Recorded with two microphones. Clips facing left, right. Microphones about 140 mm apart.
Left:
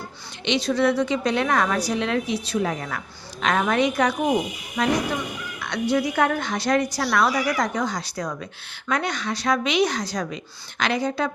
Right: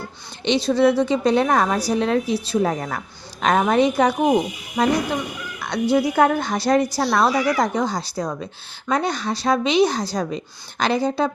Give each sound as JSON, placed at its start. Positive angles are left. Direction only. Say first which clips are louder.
{"t": 0.4, "sound": "a woman's voice", "louder": "right 4 dB", "side_deg": -30}
{"t": 5.5, "sound": "frog", "louder": "right 4 dB", "side_deg": -35}
{"t": 5.9, "sound": "a woman's voice", "louder": "right 4 dB", "side_deg": -30}